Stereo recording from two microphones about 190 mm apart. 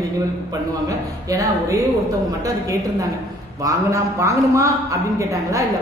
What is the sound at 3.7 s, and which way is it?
A man's voice, 15° right (ahead or behind).